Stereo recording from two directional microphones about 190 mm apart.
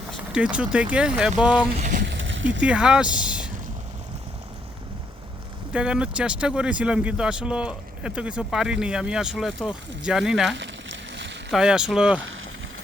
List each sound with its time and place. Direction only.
0.1 s speech: 5° right (ahead or behind)
1.7 s vehicle: 40° right (ahead or behind)
2.0 s a sound: 75° right (ahead or behind)
2.6 s speech: 5° right (ahead or behind)
5.7 s speech: 5° right (ahead or behind)
10.5 s a sound: 75° right (ahead or behind)
11.5 s speech: 5° right (ahead or behind)